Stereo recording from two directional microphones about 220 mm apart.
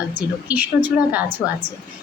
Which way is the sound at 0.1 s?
5° right (ahead or behind).